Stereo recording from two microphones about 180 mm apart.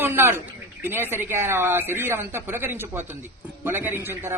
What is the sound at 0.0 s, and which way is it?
A man's voice, 15° right (ahead or behind).